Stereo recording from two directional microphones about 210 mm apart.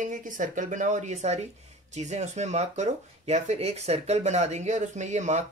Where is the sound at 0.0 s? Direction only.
40° right (ahead or behind).